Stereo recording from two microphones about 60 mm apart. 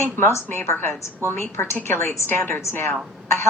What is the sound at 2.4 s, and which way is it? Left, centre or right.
Speech, left.